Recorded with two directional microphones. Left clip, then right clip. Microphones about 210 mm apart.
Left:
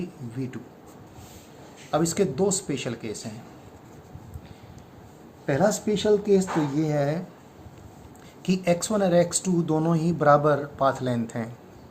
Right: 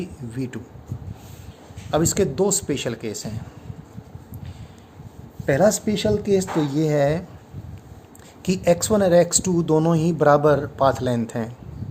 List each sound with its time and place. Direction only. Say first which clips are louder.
0.0 s speech: right 4 dB; 50° right (ahead or behind)
1.9 s speech: right 3 dB; 50° right (ahead or behind)
5.5 s speech: right 5 dB; 50° right (ahead or behind)
8.4 s speech: right 5 dB; 45° right (ahead or behind)